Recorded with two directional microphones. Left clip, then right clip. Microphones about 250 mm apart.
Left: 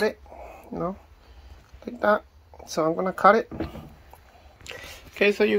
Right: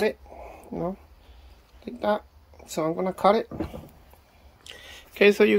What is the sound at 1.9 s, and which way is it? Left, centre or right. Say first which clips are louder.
Speech: left 4 dB; centre.